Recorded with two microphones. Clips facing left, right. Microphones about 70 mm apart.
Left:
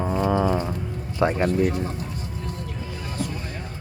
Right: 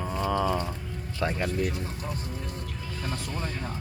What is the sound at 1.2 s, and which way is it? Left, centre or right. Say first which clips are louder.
Speech: left 8 dB; left.